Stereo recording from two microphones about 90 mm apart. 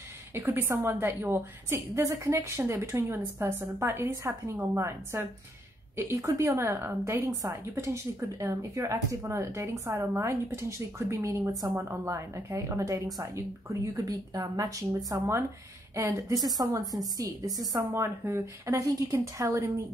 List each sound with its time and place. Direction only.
0.3 s a woman's voice: 20° right (ahead or behind); by 17.6 s 45° right (ahead or behind)
18.0 s a woman's voice: 30° right (ahead or behind)